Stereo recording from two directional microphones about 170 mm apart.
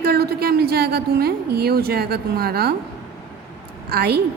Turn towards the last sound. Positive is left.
turn(degrees=-70)  # may be behind; listen again after turning